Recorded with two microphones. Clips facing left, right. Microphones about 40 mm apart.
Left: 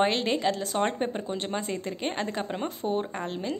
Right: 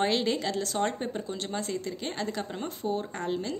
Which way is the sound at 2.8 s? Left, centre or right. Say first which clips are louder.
Left 2 dB; left.